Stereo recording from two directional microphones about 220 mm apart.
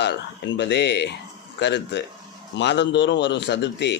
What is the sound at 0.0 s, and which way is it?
Speech, 50° left (ahead or behind).